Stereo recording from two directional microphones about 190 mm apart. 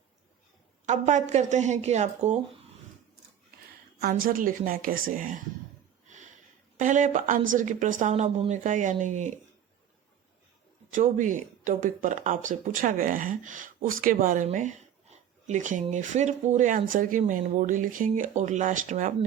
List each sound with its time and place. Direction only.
0.9 s speech: 40° right (ahead or behind)
4.1 s speech: 45° right (ahead or behind)
6.7 s speech: 40° right (ahead or behind)
10.9 s speech: 40° right (ahead or behind)